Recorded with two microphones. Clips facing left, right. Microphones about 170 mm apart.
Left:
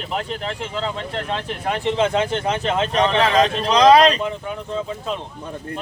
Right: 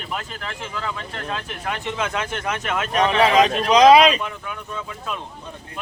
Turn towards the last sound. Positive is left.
turn(degrees=30)  # may be behind; listen again after turning